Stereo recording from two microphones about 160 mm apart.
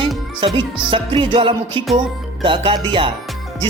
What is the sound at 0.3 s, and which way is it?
A man's voice, 30° right (ahead or behind).